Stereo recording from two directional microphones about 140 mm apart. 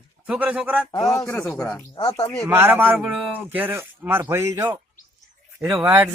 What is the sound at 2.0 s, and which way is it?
Speech, 30° left (ahead or behind).